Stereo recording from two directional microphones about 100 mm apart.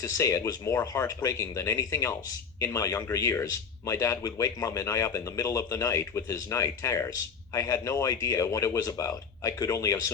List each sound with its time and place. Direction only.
0.0 s speech: 30° left (ahead or behind)